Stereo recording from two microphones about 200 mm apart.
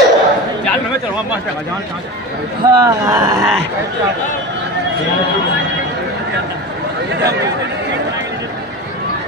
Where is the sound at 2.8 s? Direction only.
20° right (ahead or behind).